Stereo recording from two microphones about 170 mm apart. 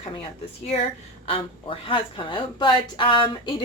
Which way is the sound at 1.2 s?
30° left (ahead or behind).